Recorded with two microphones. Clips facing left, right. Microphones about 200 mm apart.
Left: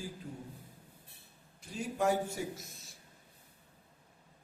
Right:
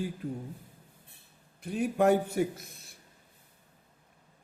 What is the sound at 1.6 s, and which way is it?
A man's voice, 60° right (ahead or behind).